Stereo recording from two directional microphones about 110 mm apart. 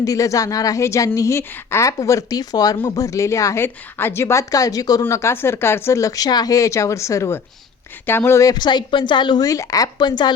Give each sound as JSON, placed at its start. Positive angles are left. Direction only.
{"t": 0.0, "sound": "a woman's voice", "side_deg": 30}
{"t": 9.5, "sound": "a woman's voice", "side_deg": 30}